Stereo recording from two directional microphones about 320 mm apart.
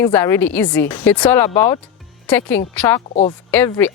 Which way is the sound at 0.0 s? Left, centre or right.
Centre.